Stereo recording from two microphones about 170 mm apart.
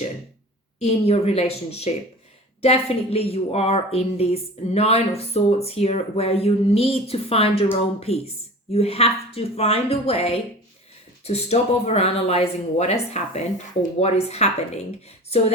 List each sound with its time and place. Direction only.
0.8 s a woman's voice: 40° left (ahead or behind)